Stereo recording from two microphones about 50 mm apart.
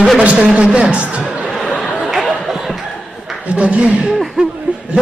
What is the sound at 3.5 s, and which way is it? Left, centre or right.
Speech, right.